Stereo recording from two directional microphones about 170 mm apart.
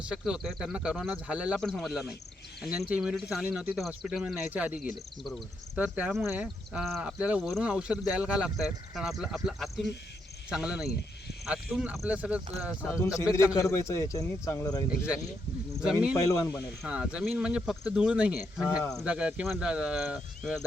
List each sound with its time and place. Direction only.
0.1 s speech: 5° right (ahead or behind)
13.7 s speech: 15° left (ahead or behind)
14.8 s speech: 5° right (ahead or behind)
16.3 s speech: 20° left (ahead or behind)
16.8 s speech: 5° right (ahead or behind)